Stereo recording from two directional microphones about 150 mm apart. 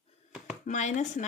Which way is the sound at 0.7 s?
55° left (ahead or behind).